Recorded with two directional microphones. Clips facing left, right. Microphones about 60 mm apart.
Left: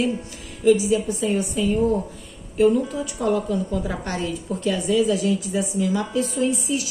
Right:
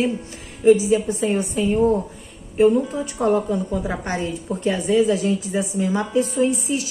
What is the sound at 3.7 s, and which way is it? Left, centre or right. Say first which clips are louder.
A woman's voice: right 2 dB; right.